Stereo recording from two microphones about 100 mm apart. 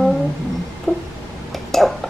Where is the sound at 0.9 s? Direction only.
20° right (ahead or behind).